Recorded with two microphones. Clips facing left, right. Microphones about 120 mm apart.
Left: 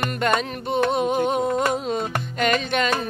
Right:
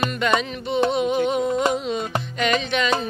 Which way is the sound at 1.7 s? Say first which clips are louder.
Even; 50° left (ahead or behind).